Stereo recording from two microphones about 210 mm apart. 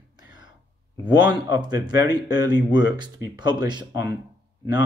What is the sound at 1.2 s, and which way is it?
Speech, 20° right (ahead or behind).